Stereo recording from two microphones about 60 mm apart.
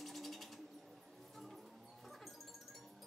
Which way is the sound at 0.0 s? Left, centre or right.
Centre.